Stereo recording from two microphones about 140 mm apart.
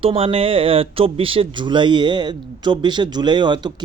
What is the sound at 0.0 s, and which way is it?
Speech, 45° right (ahead or behind).